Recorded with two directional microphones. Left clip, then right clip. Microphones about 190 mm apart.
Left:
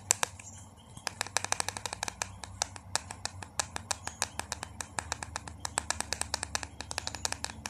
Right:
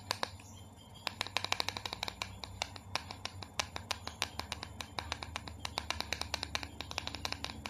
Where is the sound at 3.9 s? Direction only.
15° left (ahead or behind).